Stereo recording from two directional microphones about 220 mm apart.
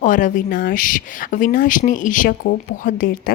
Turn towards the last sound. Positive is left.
turn(degrees=40)  # may be behind; listen again after turning